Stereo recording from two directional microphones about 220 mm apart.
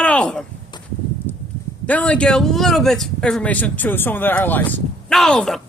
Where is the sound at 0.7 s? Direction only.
20° left (ahead or behind).